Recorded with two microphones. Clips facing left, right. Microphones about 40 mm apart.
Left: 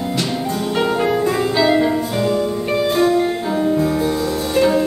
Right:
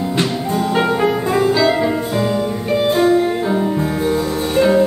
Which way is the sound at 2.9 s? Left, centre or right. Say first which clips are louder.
Right 2 dB; right.